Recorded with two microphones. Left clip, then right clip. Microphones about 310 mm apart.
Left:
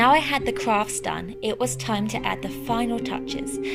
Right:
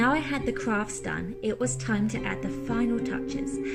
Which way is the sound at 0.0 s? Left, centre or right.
Centre.